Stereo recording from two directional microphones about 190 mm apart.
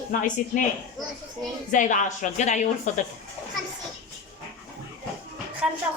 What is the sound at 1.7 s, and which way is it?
Speech, 40° left (ahead or behind).